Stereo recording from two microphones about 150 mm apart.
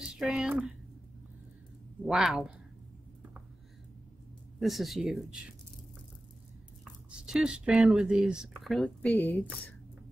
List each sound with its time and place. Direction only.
0.1 s speech: 5° right (ahead or behind)
2.0 s speech: 5° right (ahead or behind)
4.6 s speech: centre (ahead or behind)
6.8 s speech: 5° right (ahead or behind); by 9.5 s 10° left (ahead or behind)